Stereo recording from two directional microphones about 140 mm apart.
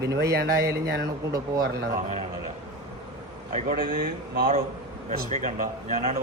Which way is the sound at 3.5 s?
80° right.